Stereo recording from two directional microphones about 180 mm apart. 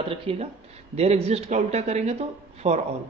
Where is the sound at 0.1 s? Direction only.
35° right (ahead or behind).